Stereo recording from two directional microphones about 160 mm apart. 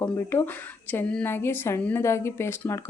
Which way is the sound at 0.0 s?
15° left (ahead or behind).